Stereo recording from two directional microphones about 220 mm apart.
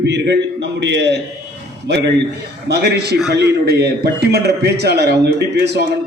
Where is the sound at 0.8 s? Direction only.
50° right (ahead or behind).